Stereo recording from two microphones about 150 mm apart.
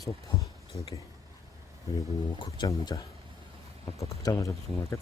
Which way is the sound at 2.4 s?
25° left (ahead or behind).